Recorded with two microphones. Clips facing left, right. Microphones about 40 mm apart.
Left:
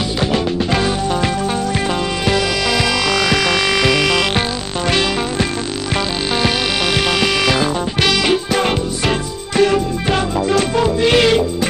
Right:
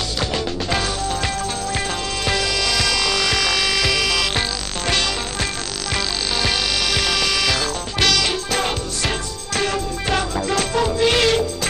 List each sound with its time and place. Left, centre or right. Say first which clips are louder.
0.2 s music: left 6 dB; centre
7.1 s music: left 5 dB; centre